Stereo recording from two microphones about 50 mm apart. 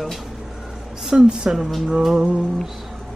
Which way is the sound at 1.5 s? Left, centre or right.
Centre.